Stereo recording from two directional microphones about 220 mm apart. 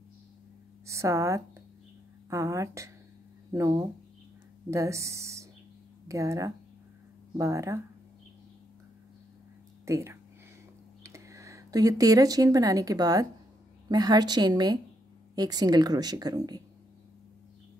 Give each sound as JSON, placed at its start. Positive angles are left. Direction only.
{"t": 0.8, "sound": "a woman's voice", "side_deg": -15}
{"t": 9.8, "sound": "a woman's voice", "side_deg": -15}